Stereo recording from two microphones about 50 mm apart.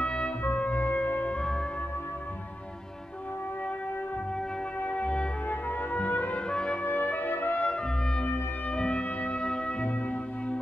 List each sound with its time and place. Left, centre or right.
0.0 s music: left
0.4 s music: left
4.8 s music: left
5.5 s music: left
6.3 s music: centre
6.8 s brass instrument: left
7.6 s brass instrument: left
8.7 s music: left